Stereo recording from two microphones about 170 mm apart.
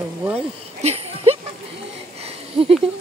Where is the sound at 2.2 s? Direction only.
35° right (ahead or behind).